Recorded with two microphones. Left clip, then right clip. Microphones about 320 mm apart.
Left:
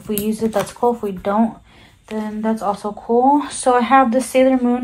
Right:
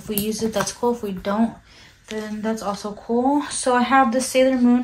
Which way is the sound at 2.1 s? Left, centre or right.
Centre.